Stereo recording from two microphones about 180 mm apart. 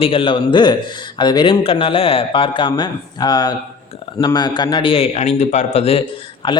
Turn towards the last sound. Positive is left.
turn(degrees=25)  # may be behind; listen again after turning